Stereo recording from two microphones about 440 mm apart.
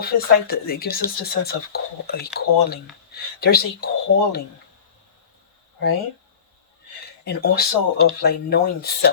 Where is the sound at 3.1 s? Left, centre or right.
Left.